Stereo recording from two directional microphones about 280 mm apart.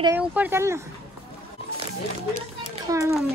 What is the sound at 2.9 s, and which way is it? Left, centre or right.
Speech, centre.